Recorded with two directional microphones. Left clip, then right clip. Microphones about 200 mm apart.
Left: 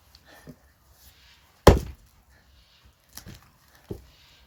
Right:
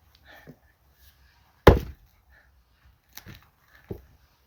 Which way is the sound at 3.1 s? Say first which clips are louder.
Even; 15° left (ahead or behind).